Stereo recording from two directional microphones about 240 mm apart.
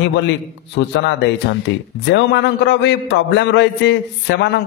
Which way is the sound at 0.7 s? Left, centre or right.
Left.